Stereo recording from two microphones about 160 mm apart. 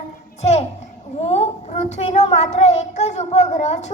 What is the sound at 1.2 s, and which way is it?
A child's voice, 40° left (ahead or behind).